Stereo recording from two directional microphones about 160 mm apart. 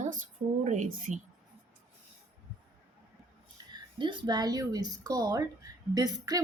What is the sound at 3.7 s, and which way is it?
A woman's voice, 30° right (ahead or behind).